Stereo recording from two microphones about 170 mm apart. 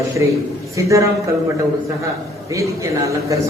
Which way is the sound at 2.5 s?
20° right (ahead or behind).